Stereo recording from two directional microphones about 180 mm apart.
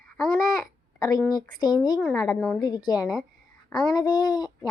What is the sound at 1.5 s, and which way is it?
Speech, 20° left (ahead or behind).